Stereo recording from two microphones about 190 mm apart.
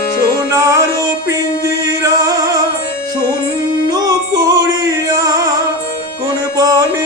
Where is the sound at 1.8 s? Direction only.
20° right (ahead or behind).